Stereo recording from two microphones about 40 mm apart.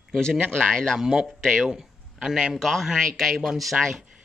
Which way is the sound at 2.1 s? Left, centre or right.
Centre.